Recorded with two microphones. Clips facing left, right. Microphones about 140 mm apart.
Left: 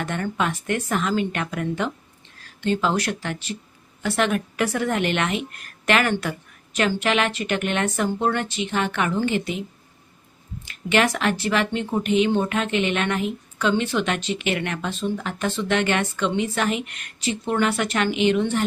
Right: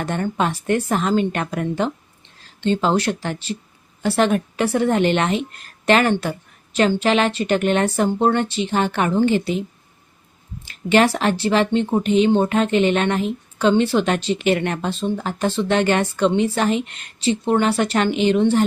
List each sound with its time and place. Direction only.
0.0 s speech: 35° right (ahead or behind)
10.7 s speech: 30° right (ahead or behind)